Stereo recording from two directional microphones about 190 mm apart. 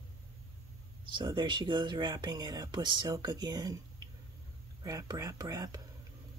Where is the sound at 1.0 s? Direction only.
25° right (ahead or behind).